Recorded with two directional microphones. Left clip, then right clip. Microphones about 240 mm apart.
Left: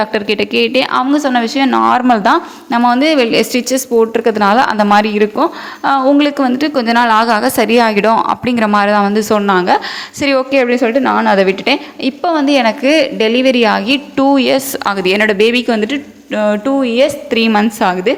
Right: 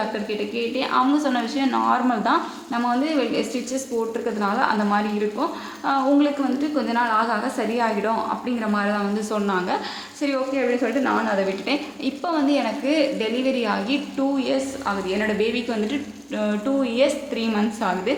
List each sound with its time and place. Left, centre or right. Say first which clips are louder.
0.1 s a woman's voice: left 12 dB; left